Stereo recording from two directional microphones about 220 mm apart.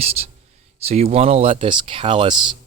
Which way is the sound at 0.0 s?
30° right (ahead or behind).